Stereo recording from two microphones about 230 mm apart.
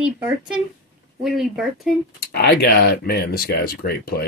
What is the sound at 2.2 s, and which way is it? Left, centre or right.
Speech, left.